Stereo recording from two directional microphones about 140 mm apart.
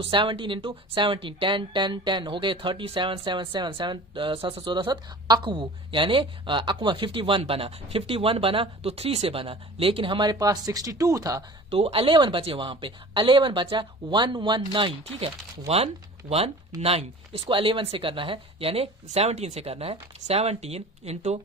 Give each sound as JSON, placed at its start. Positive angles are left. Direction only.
{"t": 0.0, "sound": "speech", "side_deg": -35}
{"t": 11.7, "sound": "speech", "side_deg": -45}